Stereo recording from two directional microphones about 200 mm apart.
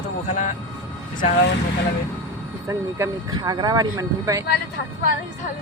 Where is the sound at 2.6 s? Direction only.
15° right (ahead or behind).